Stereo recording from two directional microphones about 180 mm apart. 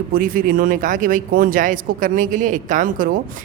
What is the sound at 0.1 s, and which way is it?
Speech, 50° right (ahead or behind).